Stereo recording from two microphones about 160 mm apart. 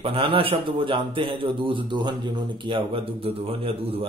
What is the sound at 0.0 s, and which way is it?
Speech, 35° right (ahead or behind).